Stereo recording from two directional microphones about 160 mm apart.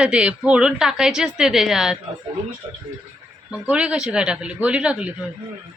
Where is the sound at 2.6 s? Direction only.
30° right (ahead or behind).